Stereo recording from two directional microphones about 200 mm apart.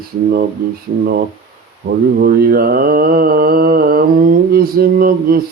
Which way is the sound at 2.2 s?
50° right (ahead or behind).